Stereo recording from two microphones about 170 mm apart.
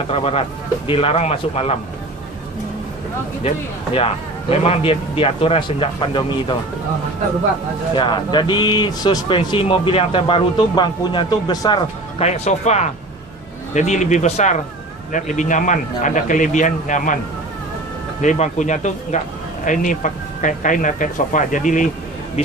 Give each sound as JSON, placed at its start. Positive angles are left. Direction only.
{"t": 0.1, "sound": "speech", "side_deg": 35}
{"t": 3.9, "sound": "speech", "side_deg": 35}
{"t": 7.9, "sound": "speech", "side_deg": 30}
{"t": 12.2, "sound": "speech", "side_deg": 40}
{"t": 18.2, "sound": "speech", "side_deg": 45}